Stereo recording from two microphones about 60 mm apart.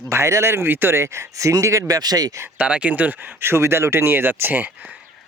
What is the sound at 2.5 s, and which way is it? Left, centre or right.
Speech, right.